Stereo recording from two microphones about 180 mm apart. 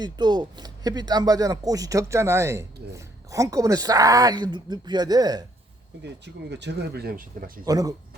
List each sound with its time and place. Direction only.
0.0 s speech: 25° right (ahead or behind)
6.0 s speech: 70° right (ahead or behind); by 7.6 s 50° right (ahead or behind)
7.6 s speech: 20° right (ahead or behind)